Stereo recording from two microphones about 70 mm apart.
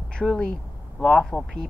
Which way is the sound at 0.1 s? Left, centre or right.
Centre.